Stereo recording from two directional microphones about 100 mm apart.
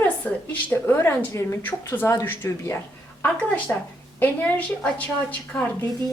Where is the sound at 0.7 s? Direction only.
25° left (ahead or behind).